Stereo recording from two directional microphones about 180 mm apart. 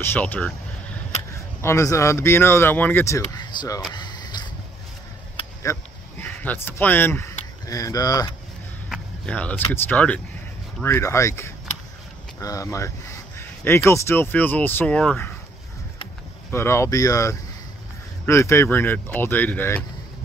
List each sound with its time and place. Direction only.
0.0 s speech: 10° left (ahead or behind)
3.9 s a sound: 25° left (ahead or behind)
5.6 s speech: 15° left (ahead or behind)
8.8 s a sound: centre (ahead or behind)
9.7 s speech: 10° left (ahead or behind)
16.4 s speech: 15° left (ahead or behind)